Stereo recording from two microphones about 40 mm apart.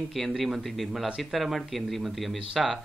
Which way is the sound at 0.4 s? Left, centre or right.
Centre.